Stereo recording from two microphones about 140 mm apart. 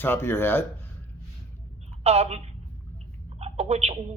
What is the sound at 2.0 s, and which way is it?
A woman's voice, 50° right (ahead or behind).